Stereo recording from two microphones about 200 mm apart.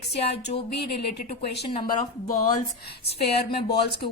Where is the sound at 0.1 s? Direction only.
55° left (ahead or behind).